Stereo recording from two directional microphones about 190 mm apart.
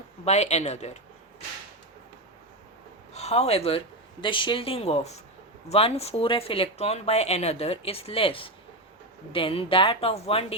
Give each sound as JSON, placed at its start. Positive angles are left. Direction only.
{"t": 0.3, "sound": "speech", "side_deg": 35}
{"t": 3.1, "sound": "speech", "side_deg": 35}